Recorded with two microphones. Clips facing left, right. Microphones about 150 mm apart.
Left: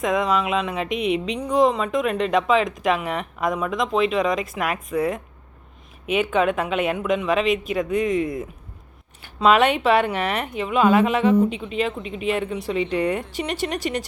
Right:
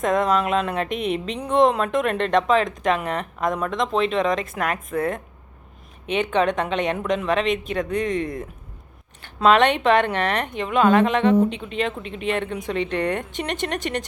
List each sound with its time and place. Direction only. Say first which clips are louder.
0.0 s speech: right 1 dB; centre (ahead or behind)